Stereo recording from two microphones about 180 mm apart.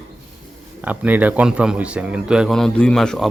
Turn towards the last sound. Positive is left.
turn(degrees=0)  # may be behind; listen again after turning